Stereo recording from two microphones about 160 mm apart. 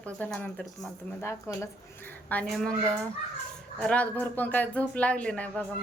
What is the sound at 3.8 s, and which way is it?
Speech, 5° left (ahead or behind).